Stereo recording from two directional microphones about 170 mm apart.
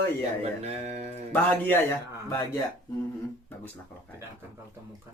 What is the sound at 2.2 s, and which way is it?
Speech, 20° left (ahead or behind).